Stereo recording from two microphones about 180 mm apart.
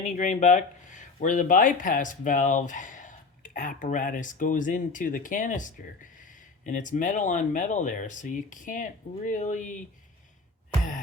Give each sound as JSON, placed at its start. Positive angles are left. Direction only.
{"t": 0.0, "sound": "speech", "side_deg": 45}